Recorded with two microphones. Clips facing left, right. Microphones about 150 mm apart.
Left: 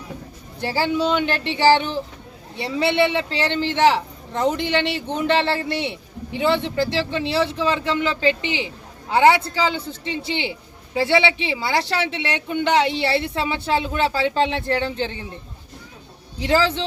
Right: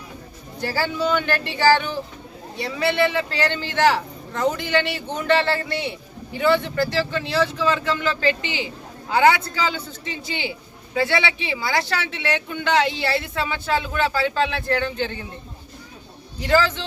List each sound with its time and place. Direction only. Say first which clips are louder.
0.6 s speech: left 2 dB; 25° left (ahead or behind)
16.4 s speech: even; 30° left (ahead or behind)